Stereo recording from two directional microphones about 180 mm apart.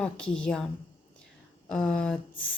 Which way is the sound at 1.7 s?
5° left (ahead or behind).